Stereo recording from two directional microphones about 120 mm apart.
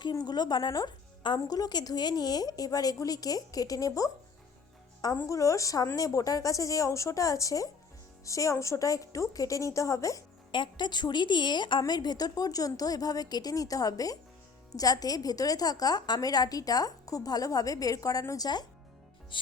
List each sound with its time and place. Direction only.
0.0 s speech: 35° left (ahead or behind)
5.1 s a woman's voice: 25° left (ahead or behind)
10.5 s speech: 40° left (ahead or behind)
19.3 s music: 45° left (ahead or behind)